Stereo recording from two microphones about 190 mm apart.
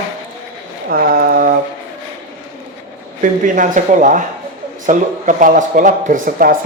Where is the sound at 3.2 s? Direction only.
45° right (ahead or behind).